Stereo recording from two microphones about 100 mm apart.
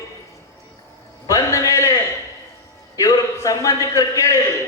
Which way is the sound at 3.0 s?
35° left (ahead or behind).